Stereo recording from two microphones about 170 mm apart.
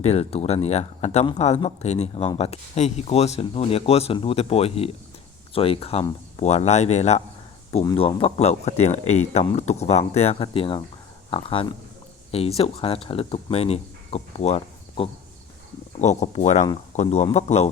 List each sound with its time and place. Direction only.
0.0 s speech: 40° left (ahead or behind)